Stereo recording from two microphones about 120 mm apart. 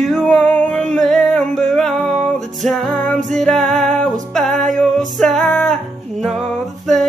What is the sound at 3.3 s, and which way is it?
Music, 5° left (ahead or behind).